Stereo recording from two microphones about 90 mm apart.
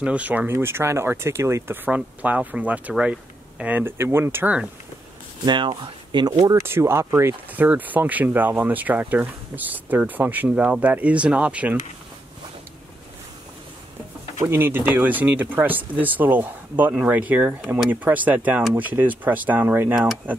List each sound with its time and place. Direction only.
0.0 s speech: 15° right (ahead or behind)
0.5 s speech: 25° right (ahead or behind)
1.9 s speech: 15° right (ahead or behind)
5.4 s speech: 55° right (ahead or behind)
6.6 s speech: 30° right (ahead or behind)
7.5 s speech: 20° right (ahead or behind)
14.4 s speech: 25° right (ahead or behind)